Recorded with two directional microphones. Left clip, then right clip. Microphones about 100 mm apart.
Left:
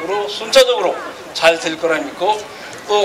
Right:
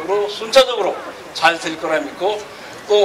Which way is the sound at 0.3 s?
30° left (ahead or behind).